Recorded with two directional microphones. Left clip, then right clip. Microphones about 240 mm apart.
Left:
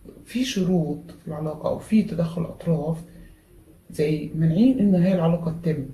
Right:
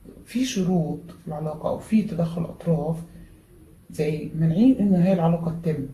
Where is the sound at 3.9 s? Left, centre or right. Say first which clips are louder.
Left 2 dB; centre.